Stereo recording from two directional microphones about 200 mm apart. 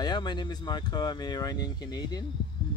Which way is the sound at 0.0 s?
20° left (ahead or behind).